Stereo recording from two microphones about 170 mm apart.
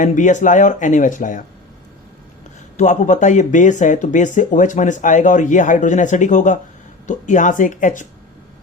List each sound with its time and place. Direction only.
0.0 s speech: 45° left (ahead or behind)
2.7 s speech: 45° left (ahead or behind)